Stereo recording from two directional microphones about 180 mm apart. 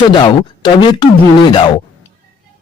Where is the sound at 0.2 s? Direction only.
25° left (ahead or behind).